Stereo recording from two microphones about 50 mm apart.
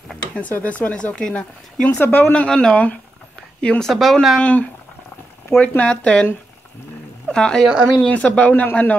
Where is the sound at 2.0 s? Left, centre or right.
Left.